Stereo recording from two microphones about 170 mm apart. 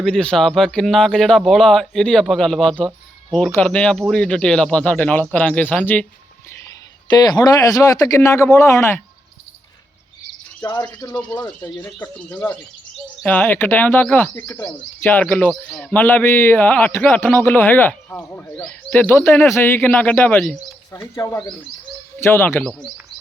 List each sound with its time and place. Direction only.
0.0 s a man's voice: 5° left (ahead or behind)
7.1 s speech: 25° left (ahead or behind)
10.6 s speech: 15° left (ahead or behind)
11.6 s a man's voice: 10° left (ahead or behind)